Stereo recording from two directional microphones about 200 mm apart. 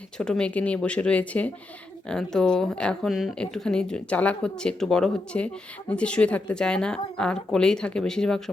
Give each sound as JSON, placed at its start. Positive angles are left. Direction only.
{"t": 0.2, "sound": "speech", "side_deg": 5}